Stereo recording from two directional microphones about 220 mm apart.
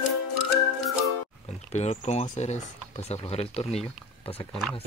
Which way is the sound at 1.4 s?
30° left (ahead or behind).